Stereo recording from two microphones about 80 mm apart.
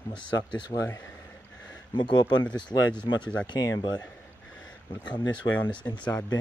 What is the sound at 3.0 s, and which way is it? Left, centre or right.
Speech, left.